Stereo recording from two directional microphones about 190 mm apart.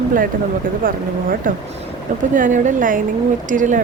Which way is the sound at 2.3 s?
40° right (ahead or behind).